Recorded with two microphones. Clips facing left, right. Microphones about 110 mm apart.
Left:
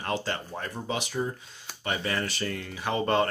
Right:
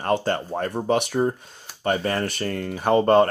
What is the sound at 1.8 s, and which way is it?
Speech, 40° right (ahead or behind).